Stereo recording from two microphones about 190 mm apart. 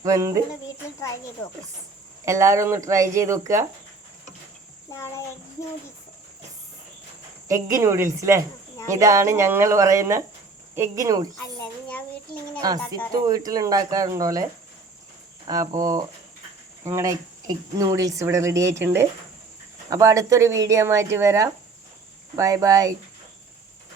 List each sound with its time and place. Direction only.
0.0 s speech: 15° right (ahead or behind)
2.2 s speech: 15° right (ahead or behind)
4.9 s a child's voice: 15° left (ahead or behind)
7.4 s speech: 15° right (ahead or behind)
11.9 s a sound: 5° left (ahead or behind)
13.2 s speech: 20° right (ahead or behind)
15.4 s speech: 20° right (ahead or behind)